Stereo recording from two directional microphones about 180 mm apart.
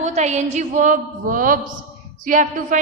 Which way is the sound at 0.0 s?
40° right (ahead or behind).